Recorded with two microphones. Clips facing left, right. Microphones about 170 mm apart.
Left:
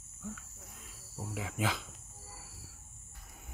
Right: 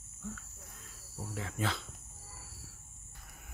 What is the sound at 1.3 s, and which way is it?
Speech, 10° left (ahead or behind).